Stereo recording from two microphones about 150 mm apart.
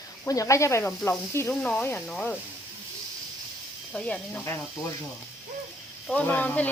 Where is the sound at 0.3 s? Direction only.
20° left (ahead or behind).